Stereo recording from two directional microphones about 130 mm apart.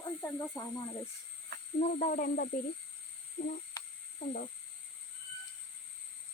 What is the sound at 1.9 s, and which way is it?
Speech, 80° left.